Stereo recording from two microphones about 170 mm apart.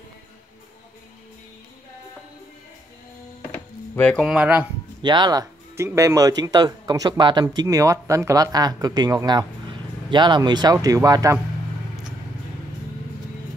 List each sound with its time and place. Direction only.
3.5 s music: 10° left (ahead or behind)
4.2 s speech: 5° right (ahead or behind)
5.0 s speech: 25° right (ahead or behind)